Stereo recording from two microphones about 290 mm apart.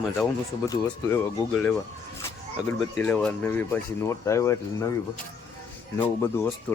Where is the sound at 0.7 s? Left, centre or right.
Centre.